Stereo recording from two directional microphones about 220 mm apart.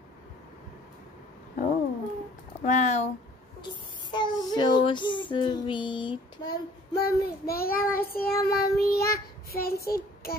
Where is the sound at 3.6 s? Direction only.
20° left (ahead or behind).